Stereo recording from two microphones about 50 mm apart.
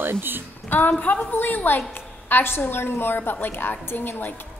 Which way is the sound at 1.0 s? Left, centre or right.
Left.